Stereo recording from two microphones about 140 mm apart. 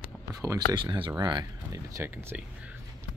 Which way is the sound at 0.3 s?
25° right (ahead or behind).